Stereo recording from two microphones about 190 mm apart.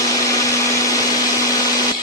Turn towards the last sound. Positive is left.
turn(degrees=15)  # may be behind; listen again after turning